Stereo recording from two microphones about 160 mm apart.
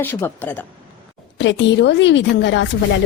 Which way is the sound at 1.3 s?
90° left.